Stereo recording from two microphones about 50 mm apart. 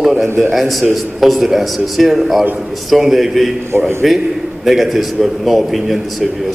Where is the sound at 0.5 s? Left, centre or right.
Centre.